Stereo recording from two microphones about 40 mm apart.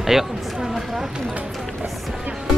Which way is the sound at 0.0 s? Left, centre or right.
Centre.